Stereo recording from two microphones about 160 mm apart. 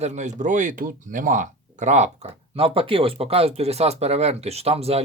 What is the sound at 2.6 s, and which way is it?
Speech, 35° right (ahead or behind).